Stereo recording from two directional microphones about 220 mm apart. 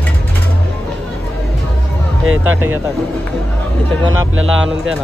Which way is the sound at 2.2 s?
65° right (ahead or behind).